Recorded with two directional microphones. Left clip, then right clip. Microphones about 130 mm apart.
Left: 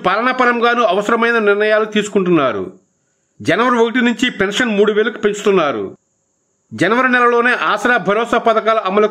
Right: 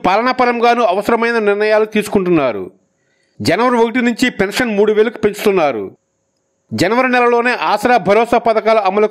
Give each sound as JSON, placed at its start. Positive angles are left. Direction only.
{"t": 0.0, "sound": "a man's voice", "side_deg": -35}